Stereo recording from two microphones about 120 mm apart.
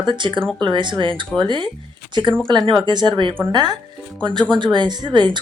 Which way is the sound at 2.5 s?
35° right (ahead or behind).